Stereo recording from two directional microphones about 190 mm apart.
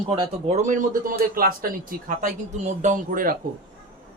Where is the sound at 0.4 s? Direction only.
40° right (ahead or behind).